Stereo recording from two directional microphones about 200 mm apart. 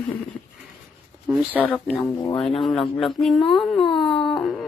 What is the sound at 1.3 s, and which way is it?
Speech, 10° right (ahead or behind).